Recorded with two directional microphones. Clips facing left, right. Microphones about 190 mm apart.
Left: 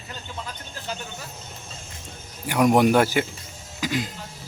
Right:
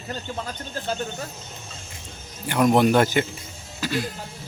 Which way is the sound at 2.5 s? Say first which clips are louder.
Even; 10° left (ahead or behind).